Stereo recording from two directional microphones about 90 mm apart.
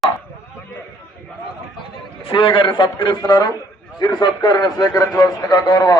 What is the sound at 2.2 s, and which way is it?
A man's voice, 70° left (ahead or behind).